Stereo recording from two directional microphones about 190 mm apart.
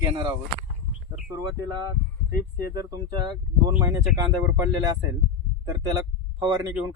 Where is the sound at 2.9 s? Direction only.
20° right (ahead or behind).